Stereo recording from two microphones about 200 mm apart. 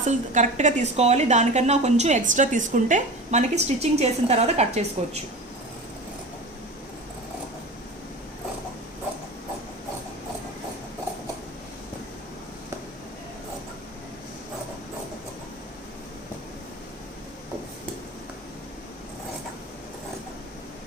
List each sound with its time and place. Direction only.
0.0 s a woman's voice: 35° right (ahead or behind)